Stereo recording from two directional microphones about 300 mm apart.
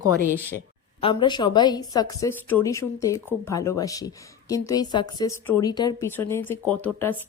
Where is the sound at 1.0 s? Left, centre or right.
Centre.